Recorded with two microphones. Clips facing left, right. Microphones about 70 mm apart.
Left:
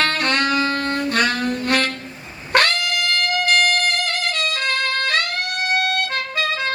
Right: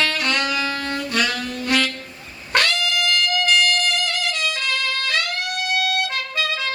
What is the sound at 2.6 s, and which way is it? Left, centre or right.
Music, left.